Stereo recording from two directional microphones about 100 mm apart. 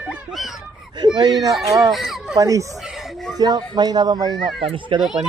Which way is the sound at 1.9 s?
Centre (ahead or behind).